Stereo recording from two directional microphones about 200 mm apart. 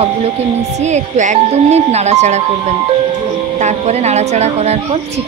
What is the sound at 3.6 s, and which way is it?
A woman's voice, 35° right (ahead or behind).